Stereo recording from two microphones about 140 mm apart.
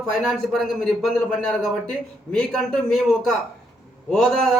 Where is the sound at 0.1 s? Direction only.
Centre (ahead or behind).